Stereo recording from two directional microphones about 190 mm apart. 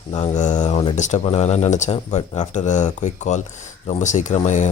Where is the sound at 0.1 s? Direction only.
40° left (ahead or behind).